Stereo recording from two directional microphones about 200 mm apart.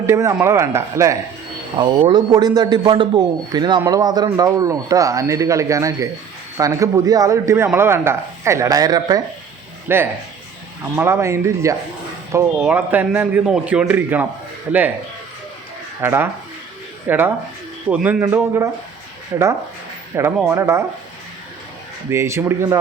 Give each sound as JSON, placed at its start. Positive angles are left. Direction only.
{"t": 0.0, "sound": "a man's voice", "side_deg": -15}
{"t": 16.0, "sound": "a man's voice", "side_deg": -10}
{"t": 22.1, "sound": "a man's voice", "side_deg": -15}